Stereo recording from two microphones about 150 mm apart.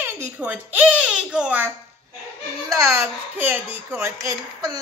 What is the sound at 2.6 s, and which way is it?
A child's voice, 20° right (ahead or behind).